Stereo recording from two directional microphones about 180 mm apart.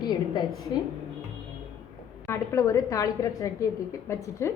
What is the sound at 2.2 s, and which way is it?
A woman's voice, 15° left (ahead or behind).